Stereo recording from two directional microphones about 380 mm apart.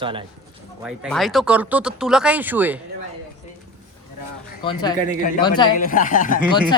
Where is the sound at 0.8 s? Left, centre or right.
Centre.